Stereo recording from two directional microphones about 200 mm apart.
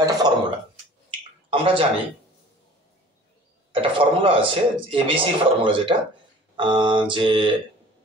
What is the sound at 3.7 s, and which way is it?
Speech, 25° right (ahead or behind).